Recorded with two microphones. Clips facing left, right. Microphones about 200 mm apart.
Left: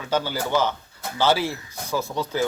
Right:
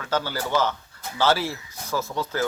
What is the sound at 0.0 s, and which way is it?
A man's voice, 10° left (ahead or behind).